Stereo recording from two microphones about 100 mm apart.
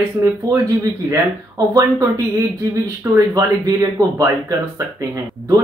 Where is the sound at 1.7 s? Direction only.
35° right (ahead or behind).